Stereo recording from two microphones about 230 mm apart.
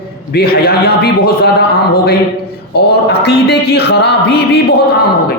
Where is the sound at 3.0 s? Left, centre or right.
Left.